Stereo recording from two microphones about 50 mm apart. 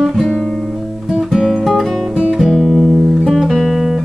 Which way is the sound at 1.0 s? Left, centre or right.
Centre.